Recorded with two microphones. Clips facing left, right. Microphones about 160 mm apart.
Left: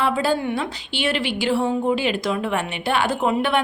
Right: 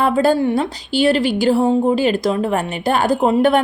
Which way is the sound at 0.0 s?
45° right (ahead or behind).